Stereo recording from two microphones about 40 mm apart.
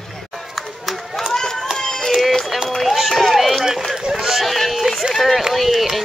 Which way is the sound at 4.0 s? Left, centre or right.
Centre.